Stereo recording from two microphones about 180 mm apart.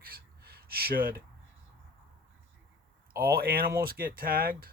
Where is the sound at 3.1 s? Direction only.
55° right (ahead or behind).